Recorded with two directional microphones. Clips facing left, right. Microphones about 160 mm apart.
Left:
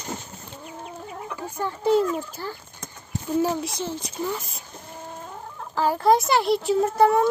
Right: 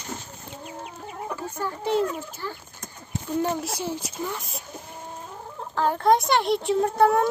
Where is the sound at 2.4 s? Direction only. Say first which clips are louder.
Even; 35° left (ahead or behind).